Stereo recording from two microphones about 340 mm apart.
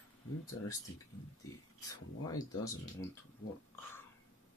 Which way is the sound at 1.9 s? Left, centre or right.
Centre.